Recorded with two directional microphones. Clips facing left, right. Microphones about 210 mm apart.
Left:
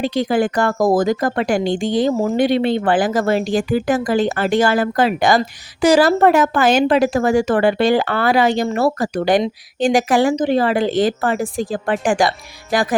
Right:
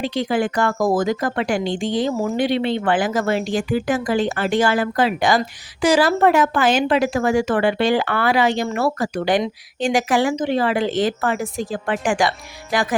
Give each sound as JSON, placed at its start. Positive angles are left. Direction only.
{"t": 0.0, "sound": "speech", "side_deg": 40}